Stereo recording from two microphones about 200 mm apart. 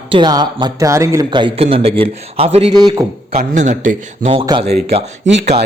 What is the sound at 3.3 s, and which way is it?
Speech, 35° right (ahead or behind).